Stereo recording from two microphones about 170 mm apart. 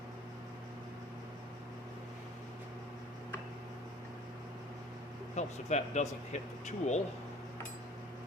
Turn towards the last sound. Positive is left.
turn(degrees=40)  # may be behind; listen again after turning